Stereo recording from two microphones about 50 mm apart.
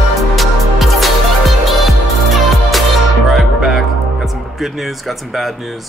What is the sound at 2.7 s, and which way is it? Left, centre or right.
Music, centre.